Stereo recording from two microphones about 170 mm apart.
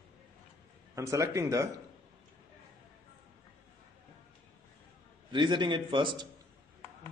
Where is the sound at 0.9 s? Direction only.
20° right (ahead or behind).